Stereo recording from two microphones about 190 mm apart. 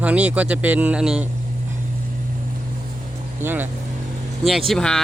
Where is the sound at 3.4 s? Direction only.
10° right (ahead or behind).